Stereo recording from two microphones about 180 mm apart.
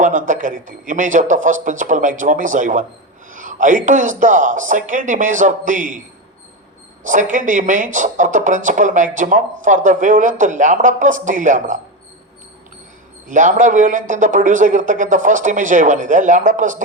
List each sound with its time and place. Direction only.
0.0 s a man's voice: 45° right (ahead or behind)
7.0 s a man's voice: 45° right (ahead or behind)
13.2 s a man's voice: 45° right (ahead or behind)